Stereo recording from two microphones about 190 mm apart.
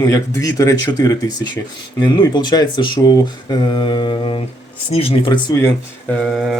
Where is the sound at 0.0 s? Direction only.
20° left (ahead or behind).